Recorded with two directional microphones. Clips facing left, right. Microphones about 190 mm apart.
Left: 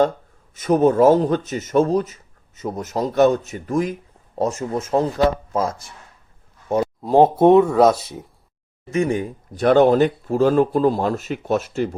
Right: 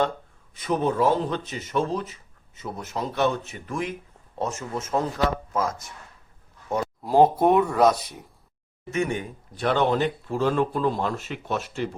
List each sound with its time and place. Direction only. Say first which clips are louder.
0.5 s speech: left 8 dB; 45° left (ahead or behind)